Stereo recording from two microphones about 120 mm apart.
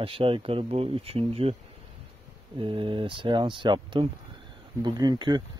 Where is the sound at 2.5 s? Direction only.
45° right (ahead or behind).